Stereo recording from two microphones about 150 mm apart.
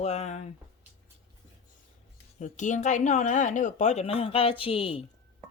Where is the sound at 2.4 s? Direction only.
55° left (ahead or behind); by 5.0 s 40° left (ahead or behind).